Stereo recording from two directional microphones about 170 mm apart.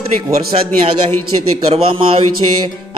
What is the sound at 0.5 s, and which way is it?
Speech, 40° right (ahead or behind).